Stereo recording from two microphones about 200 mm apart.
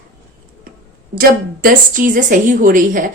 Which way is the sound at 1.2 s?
45° right (ahead or behind).